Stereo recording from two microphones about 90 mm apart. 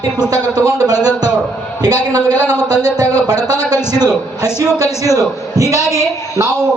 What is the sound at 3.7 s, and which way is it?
Speech, 45° right (ahead or behind).